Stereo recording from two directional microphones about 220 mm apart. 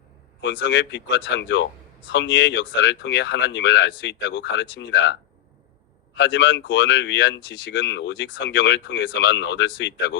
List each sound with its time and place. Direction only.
0.4 s speech: 55° left (ahead or behind)
6.1 s speech: 55° left (ahead or behind)